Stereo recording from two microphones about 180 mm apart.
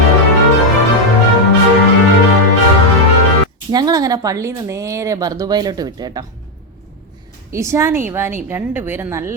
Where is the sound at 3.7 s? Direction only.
20° right (ahead or behind).